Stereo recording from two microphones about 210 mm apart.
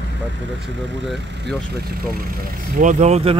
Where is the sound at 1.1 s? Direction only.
Centre (ahead or behind).